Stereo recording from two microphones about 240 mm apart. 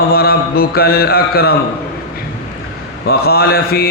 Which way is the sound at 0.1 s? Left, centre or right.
Left.